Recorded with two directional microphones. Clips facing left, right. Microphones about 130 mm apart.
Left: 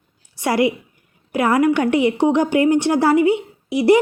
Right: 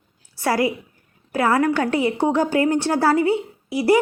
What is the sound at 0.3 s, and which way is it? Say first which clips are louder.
A woman's voice: left 3 dB; 20° left (ahead or behind).